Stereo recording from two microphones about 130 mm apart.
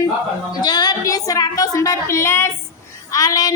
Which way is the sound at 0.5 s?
30° left (ahead or behind).